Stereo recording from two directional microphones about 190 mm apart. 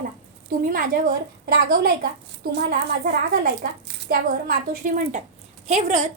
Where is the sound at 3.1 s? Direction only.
55° right (ahead or behind).